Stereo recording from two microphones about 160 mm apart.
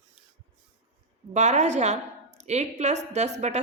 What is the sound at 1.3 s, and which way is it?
A woman's voice, 45° right (ahead or behind).